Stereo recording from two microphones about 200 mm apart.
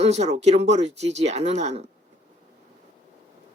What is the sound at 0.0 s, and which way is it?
Speech, 35° right (ahead or behind).